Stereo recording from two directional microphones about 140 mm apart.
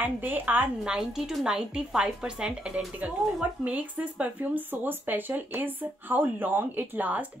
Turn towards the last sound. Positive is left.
turn(degrees=-10)  # may be behind; listen again after turning